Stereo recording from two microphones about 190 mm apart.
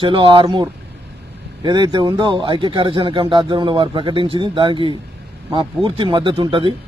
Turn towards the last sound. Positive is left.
turn(degrees=-25)  # may be behind; listen again after turning